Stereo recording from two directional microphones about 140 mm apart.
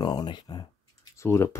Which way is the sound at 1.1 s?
20° left (ahead or behind).